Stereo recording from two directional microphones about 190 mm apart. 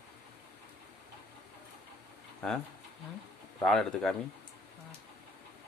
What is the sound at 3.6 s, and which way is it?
Speech, 5° left (ahead or behind).